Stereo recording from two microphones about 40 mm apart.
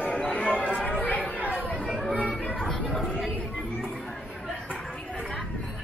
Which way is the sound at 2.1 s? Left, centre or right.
Left.